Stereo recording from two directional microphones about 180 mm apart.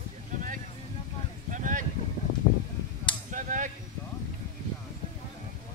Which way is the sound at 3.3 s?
45° right (ahead or behind).